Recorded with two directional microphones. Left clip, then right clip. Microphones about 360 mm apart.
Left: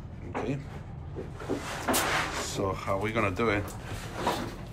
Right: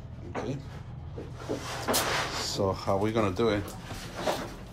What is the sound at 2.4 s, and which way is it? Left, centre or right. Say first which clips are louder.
Speech: right 2 dB; centre.